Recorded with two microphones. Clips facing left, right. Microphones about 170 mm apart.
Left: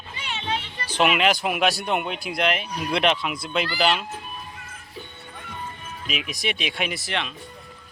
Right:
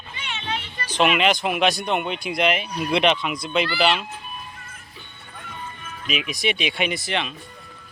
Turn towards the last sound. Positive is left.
turn(degrees=0)  # may be behind; listen again after turning